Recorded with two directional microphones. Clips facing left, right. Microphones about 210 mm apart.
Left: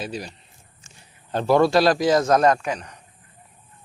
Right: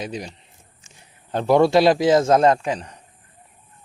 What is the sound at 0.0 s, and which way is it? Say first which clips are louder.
A man's voice: right 1 dB; 20° right (ahead or behind).